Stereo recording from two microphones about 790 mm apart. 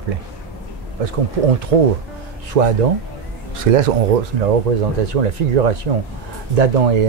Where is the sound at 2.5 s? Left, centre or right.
Right.